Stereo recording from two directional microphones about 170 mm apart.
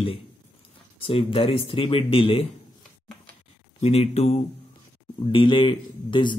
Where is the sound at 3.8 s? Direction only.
40° left (ahead or behind).